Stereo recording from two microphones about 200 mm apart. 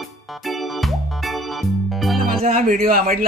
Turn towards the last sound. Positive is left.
turn(degrees=-45)  # may be behind; listen again after turning